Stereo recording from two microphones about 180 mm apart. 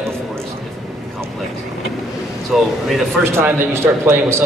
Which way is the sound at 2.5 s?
5° right (ahead or behind).